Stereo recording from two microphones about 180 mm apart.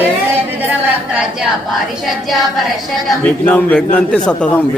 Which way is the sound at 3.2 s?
5° left (ahead or behind).